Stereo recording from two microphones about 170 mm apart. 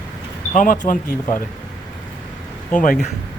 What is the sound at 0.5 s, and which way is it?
Speech, 50° left (ahead or behind).